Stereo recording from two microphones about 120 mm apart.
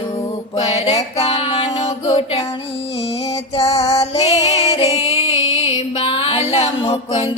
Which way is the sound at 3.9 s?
60° left (ahead or behind).